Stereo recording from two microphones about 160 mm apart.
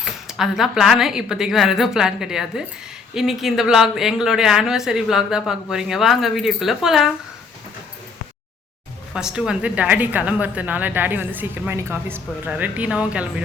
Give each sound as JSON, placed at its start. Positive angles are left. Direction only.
{"t": 0.0, "sound": "speech", "side_deg": -5}
{"t": 9.1, "sound": "a woman's voice", "side_deg": -5}